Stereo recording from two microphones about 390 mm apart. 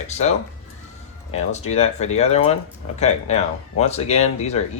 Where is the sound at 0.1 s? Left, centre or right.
Centre.